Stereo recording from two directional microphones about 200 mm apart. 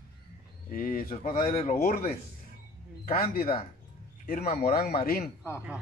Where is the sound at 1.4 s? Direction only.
30° left (ahead or behind).